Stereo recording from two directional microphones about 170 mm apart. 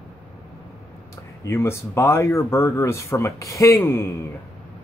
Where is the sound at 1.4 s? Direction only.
15° left (ahead or behind).